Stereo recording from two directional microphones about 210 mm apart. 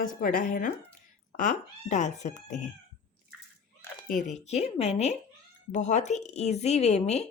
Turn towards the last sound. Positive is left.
turn(degrees=30)  # may be behind; listen again after turning